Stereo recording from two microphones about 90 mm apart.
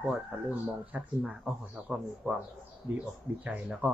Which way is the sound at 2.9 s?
15° right (ahead or behind).